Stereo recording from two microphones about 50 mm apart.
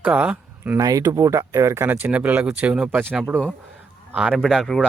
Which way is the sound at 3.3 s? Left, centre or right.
Right.